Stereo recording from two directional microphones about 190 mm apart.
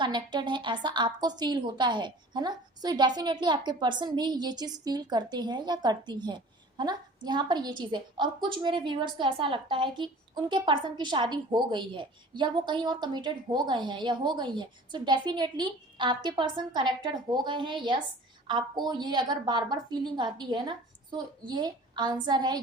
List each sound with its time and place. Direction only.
0.0 s a woman's voice: 25° right (ahead or behind)